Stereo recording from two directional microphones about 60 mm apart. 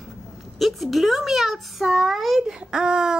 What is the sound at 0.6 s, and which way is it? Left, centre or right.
A child's voice, centre.